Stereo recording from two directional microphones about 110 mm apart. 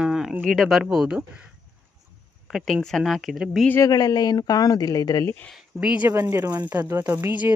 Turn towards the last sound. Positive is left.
turn(degrees=-20)  # may be behind; listen again after turning